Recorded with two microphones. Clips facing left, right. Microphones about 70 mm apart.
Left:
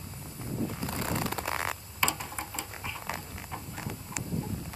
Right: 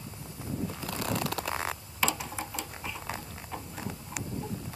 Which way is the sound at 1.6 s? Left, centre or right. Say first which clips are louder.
Even; centre.